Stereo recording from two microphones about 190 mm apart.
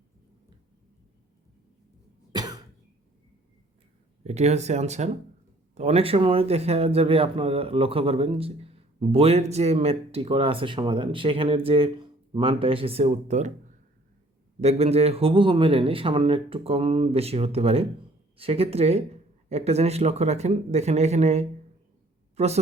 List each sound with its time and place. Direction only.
2.3 s cough: 20° right (ahead or behind)
4.2 s a man's voice: 35° right (ahead or behind)
14.6 s a man's voice: 35° right (ahead or behind)